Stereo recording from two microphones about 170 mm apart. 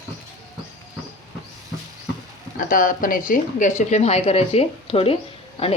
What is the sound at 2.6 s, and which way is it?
Speech, 55° left (ahead or behind).